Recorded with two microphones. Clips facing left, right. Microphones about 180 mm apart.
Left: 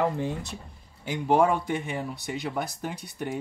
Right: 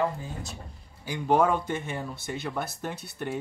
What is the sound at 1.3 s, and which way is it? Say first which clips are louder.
Speech: left 1 dB; 10° left (ahead or behind).